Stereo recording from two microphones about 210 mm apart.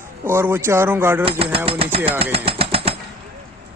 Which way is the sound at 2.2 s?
25° right (ahead or behind).